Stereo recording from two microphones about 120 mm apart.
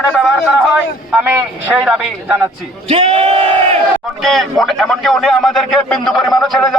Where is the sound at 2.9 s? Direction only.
60° right (ahead or behind).